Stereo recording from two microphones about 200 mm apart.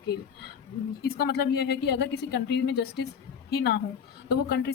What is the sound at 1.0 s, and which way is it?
Speech, 50° left (ahead or behind).